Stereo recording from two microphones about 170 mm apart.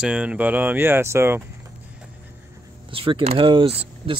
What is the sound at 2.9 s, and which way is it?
Speech, 30° right (ahead or behind).